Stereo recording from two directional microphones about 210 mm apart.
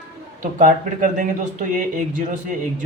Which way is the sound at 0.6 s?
40° right (ahead or behind).